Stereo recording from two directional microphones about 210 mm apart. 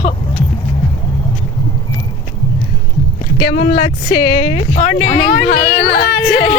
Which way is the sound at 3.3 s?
25° left (ahead or behind).